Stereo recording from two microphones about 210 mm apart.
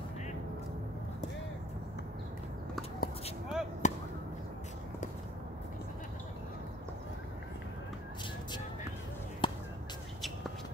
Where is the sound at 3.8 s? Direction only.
35° left (ahead or behind).